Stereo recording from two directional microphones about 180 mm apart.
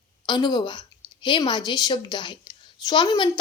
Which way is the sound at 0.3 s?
25° left (ahead or behind).